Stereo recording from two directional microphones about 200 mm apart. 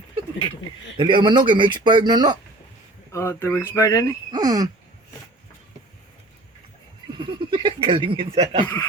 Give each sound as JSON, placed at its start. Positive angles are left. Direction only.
{"t": 0.9, "sound": "speech", "side_deg": -25}
{"t": 3.1, "sound": "speech", "side_deg": 15}
{"t": 4.3, "sound": "speech", "side_deg": -20}
{"t": 7.2, "sound": "speech", "side_deg": -25}
{"t": 8.6, "sound": "speech", "side_deg": 10}